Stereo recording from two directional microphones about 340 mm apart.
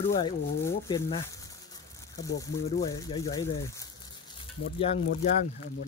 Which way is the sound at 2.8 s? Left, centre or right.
Centre.